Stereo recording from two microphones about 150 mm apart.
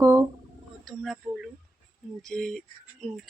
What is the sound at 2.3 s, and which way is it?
Speech, 5° left (ahead or behind).